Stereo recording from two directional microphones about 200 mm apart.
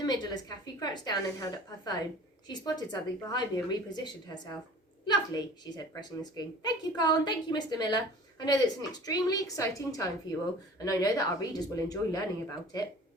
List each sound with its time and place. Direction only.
0.0 s a woman's voice: 20° left (ahead or behind)